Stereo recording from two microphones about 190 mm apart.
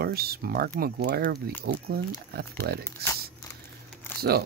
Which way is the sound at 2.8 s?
15° left (ahead or behind).